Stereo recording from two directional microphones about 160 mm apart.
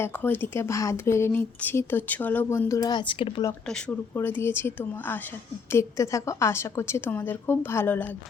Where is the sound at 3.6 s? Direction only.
5° left (ahead or behind).